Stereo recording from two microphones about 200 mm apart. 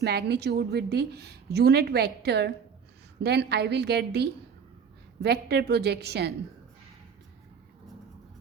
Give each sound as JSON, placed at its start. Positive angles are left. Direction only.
{"t": 0.0, "sound": "a woman's voice", "side_deg": -55}